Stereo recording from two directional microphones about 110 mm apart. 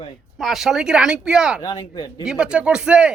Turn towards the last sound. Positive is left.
turn(degrees=-10)  # may be behind; listen again after turning